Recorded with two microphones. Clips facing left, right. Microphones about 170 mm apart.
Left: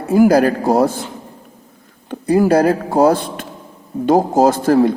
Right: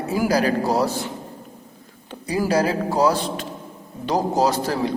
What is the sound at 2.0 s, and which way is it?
A man's voice, 55° left (ahead or behind).